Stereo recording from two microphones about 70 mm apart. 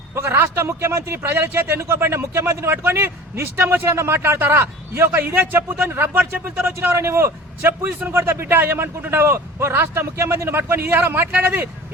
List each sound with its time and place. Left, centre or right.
0.1 s a man's voice: right